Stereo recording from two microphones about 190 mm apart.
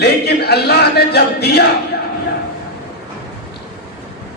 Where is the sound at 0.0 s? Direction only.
55° left (ahead or behind).